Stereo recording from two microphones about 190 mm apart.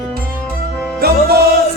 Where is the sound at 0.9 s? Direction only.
55° right (ahead or behind).